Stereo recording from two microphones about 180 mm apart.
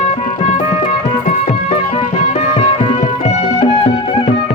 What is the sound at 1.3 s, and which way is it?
Music, 40° left (ahead or behind).